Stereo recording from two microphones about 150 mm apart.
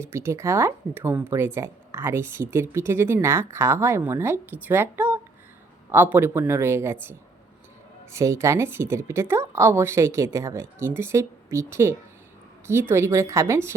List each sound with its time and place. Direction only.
0.0 s speech: 15° right (ahead or behind)